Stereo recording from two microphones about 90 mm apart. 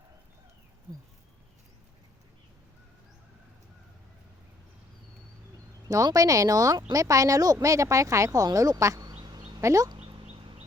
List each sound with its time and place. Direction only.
6.1 s speech: 40° right (ahead or behind)